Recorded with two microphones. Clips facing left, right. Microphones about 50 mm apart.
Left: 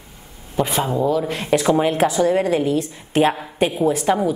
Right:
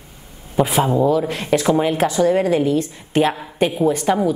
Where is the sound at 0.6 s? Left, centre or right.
Centre.